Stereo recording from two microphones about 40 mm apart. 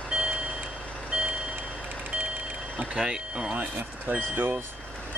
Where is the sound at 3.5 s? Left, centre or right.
Right.